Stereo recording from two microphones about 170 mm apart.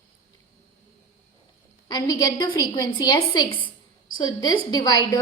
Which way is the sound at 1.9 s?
20° left (ahead or behind).